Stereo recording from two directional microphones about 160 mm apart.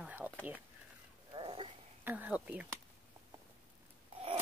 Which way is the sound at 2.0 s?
10° right (ahead or behind).